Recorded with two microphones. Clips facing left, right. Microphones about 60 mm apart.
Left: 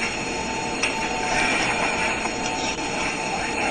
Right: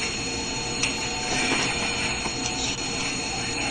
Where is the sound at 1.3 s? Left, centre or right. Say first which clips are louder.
Left 2 dB; left.